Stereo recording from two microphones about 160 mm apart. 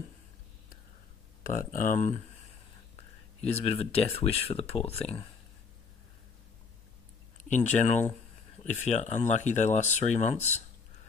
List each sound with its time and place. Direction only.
1.4 s speech: 60° left (ahead or behind)
3.3 s speech: 40° left (ahead or behind)
7.4 s speech: 50° left (ahead or behind)